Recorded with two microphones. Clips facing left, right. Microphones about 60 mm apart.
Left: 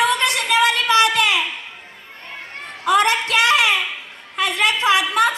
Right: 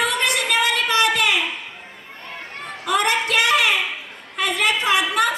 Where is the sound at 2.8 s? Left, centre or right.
Left.